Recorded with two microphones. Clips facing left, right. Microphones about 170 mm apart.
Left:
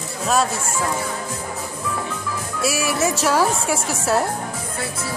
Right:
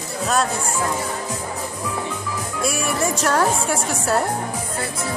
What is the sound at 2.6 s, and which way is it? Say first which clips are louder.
A woman's voice: left 2 dB; 5° left (ahead or behind).